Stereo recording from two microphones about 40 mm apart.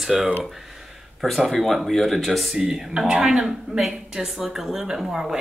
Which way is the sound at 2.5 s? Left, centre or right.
Centre.